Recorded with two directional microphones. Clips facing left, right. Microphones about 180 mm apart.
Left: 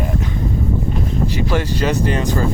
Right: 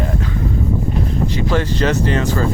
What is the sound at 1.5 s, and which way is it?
Speech, 10° left (ahead or behind).